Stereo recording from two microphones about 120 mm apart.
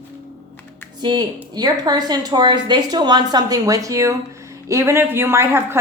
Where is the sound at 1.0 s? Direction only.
35° right (ahead or behind).